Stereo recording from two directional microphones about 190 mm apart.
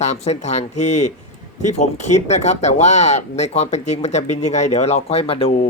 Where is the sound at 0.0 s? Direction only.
35° left (ahead or behind).